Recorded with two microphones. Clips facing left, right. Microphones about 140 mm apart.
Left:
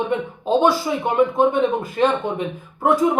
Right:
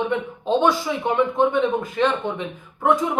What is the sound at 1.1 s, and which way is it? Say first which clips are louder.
Speech: left 3 dB; 35° left (ahead or behind).